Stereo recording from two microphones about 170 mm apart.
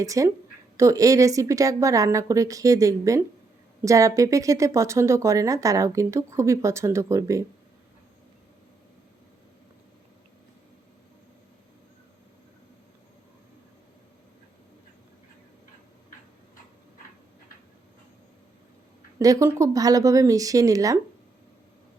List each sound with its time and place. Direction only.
0.0 s a woman's voice: 20° right (ahead or behind)
19.2 s a woman's voice: 20° right (ahead or behind)